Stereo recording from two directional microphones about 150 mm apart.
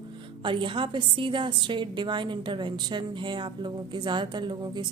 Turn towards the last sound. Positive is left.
turn(degrees=-30)  # may be behind; listen again after turning